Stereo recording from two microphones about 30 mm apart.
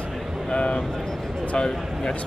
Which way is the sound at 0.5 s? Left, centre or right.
Left.